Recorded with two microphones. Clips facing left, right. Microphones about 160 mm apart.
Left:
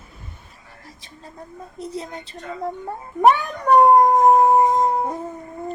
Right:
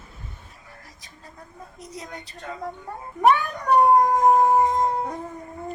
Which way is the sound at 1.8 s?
30° left (ahead or behind).